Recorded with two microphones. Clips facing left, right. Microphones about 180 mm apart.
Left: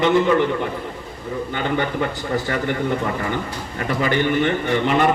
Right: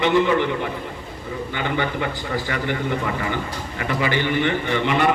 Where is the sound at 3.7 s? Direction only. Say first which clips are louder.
Left 2 dB; 45° left (ahead or behind).